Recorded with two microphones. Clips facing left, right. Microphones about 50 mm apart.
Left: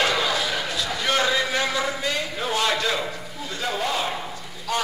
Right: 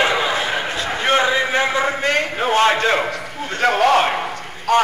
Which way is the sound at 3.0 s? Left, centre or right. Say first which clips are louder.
Right 7 dB; right.